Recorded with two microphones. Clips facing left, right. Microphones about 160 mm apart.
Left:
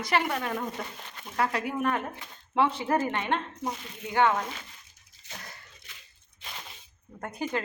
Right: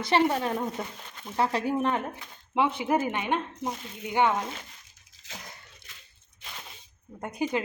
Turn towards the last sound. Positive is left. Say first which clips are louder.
# right 3 dB
turn(degrees=-15)  # may be behind; listen again after turning